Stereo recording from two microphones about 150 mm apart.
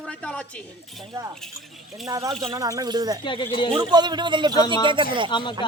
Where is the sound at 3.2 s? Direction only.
35° left (ahead or behind).